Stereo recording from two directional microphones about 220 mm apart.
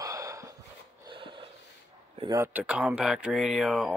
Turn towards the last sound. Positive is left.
turn(degrees=0)  # may be behind; listen again after turning